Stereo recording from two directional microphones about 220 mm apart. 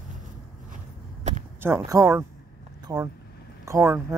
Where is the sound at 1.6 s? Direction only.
10° right (ahead or behind).